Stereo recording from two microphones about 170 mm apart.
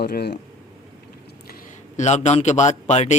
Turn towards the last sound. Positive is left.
turn(degrees=45)  # may be behind; listen again after turning